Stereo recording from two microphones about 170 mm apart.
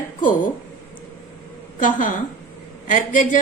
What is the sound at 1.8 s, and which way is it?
A woman's voice, 50° left (ahead or behind).